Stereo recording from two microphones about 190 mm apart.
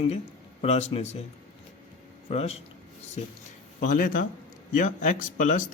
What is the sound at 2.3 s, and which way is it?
Speech, 30° left (ahead or behind).